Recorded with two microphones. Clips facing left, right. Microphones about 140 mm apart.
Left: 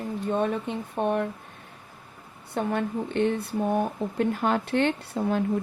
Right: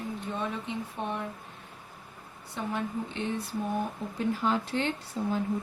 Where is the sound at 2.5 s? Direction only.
60° left (ahead or behind).